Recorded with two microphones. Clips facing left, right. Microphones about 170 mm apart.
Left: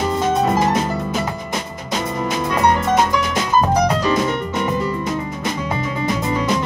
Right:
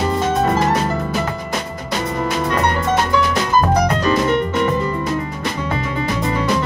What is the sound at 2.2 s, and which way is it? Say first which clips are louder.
Music: left 2 dB; 20° left (ahead or behind).